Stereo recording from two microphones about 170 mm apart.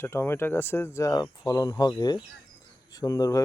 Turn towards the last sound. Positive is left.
turn(degrees=20)  # may be behind; listen again after turning